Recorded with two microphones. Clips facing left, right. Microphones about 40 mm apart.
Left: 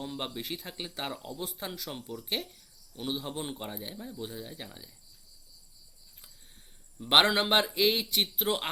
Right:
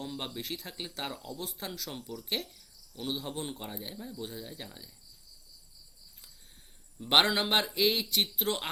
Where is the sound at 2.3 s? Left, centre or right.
Centre.